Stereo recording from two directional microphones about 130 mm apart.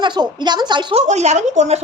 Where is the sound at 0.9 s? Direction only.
60° right (ahead or behind).